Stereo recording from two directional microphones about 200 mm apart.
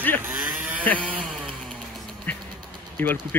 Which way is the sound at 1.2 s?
Centre (ahead or behind).